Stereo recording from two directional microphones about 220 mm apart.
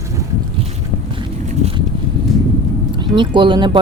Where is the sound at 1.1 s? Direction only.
25° right (ahead or behind).